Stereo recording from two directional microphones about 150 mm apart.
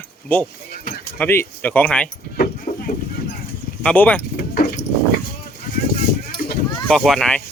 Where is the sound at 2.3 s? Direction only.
70° left (ahead or behind).